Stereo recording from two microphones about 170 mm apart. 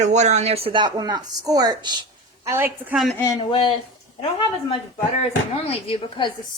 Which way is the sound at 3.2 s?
15° left (ahead or behind).